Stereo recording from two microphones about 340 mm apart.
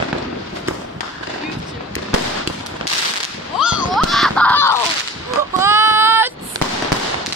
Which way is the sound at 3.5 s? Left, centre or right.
Centre.